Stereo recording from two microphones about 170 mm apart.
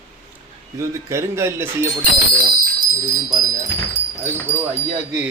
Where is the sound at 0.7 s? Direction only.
15° right (ahead or behind).